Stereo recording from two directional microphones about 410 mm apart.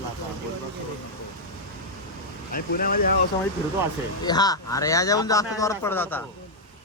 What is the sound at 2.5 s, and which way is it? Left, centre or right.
Speech, left.